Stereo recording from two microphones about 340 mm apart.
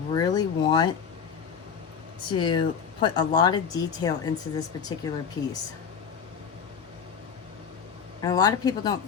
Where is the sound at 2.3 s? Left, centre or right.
Centre.